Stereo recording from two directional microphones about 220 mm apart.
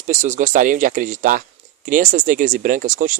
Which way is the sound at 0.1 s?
35° right (ahead or behind).